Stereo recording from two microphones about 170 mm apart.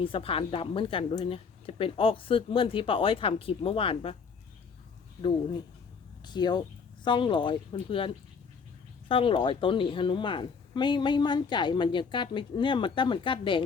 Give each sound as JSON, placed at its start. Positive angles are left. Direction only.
{"t": 0.0, "sound": "a woman's voice", "side_deg": 30}
{"t": 6.2, "sound": "speech", "side_deg": 25}